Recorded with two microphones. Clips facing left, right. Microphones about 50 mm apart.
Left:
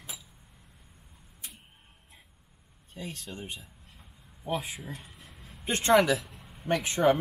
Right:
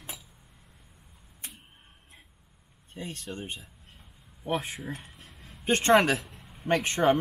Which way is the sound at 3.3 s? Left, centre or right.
Right.